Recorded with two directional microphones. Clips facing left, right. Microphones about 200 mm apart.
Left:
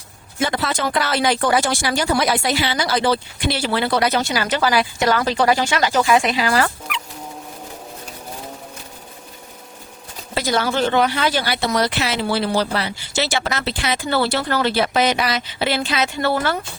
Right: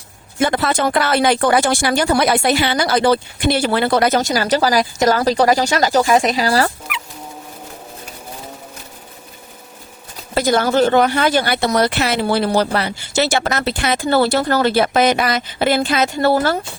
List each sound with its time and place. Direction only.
0.3 s speech: 55° right (ahead or behind); by 6.7 s 40° right (ahead or behind)
10.3 s speech: 50° right (ahead or behind)